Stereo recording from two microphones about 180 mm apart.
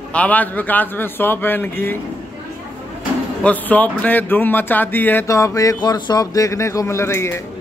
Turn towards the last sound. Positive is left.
turn(degrees=15)  # may be behind; listen again after turning